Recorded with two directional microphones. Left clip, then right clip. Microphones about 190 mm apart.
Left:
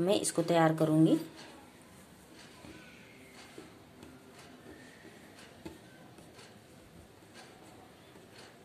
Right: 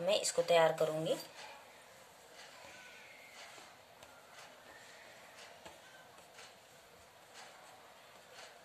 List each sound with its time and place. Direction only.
0.0 s speech: 25° left (ahead or behind)